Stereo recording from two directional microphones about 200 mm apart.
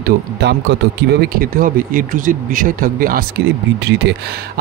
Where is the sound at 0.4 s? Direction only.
55° right (ahead or behind).